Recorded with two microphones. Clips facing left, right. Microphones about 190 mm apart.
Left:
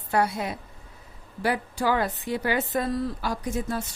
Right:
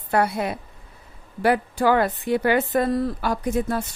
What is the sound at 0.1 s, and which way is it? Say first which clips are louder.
Speech: right 3 dB; 60° right (ahead or behind).